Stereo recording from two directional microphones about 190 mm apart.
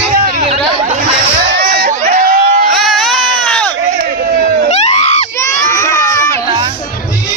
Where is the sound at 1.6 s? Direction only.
55° right (ahead or behind).